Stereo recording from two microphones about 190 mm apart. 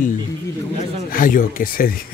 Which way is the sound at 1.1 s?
45° left (ahead or behind).